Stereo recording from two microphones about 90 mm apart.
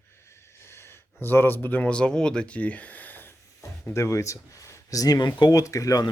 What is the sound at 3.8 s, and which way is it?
Speech, 35° left (ahead or behind).